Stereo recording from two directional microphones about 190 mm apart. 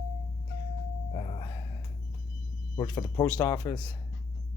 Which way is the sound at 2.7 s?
25° left (ahead or behind).